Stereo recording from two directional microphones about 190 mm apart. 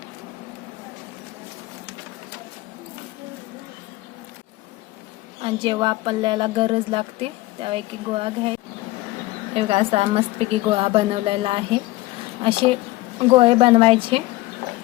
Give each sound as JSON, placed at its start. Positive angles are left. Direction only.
{"t": 5.4, "sound": "speech", "side_deg": -25}
{"t": 9.6, "sound": "speech", "side_deg": -30}